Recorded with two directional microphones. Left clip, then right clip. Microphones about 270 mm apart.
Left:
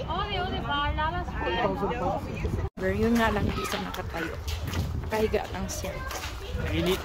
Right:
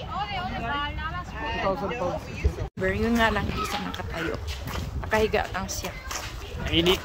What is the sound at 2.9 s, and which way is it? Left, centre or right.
Speech, centre.